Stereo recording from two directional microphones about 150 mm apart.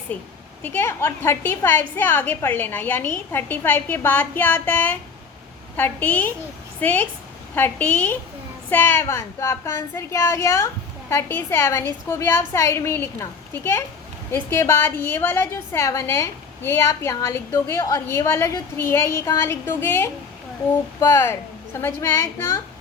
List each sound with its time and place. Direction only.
0.1 s a woman's voice: 10° left (ahead or behind)